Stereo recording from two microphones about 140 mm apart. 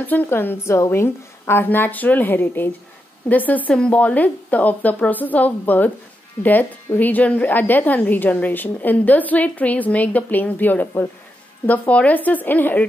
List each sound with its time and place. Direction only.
0.0 s speech: 10° left (ahead or behind)